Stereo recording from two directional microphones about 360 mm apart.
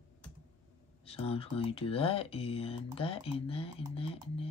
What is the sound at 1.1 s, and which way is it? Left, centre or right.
Speech, centre.